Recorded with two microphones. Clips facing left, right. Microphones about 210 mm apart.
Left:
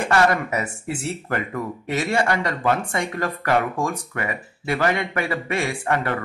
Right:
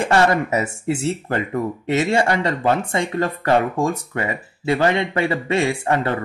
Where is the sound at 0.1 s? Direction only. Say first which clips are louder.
Right 2 dB; 25° right (ahead or behind).